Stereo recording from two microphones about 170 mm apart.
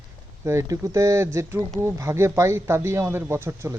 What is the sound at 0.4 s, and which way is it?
Speech, 15° right (ahead or behind).